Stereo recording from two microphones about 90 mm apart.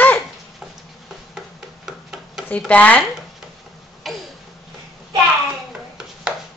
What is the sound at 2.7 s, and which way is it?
Speech, 15° left (ahead or behind).